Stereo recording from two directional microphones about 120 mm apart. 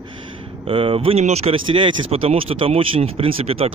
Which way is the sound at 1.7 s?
45° right (ahead or behind).